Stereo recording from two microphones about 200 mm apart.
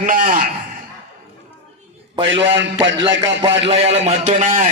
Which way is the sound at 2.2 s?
70° right (ahead or behind).